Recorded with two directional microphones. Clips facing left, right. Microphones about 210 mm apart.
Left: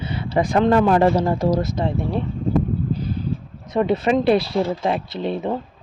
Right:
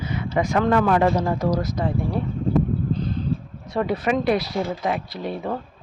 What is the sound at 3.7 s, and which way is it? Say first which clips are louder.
Speech: left 4 dB; 25° left (ahead or behind).